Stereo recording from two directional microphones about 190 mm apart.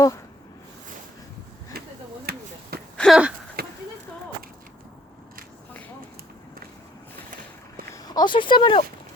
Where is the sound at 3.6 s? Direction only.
50° right (ahead or behind).